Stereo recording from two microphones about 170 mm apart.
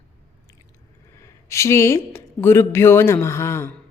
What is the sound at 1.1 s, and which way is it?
Speech, 15° left (ahead or behind).